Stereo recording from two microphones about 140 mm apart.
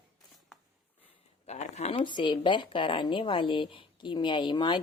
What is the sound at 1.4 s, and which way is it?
Speech, 50° left (ahead or behind).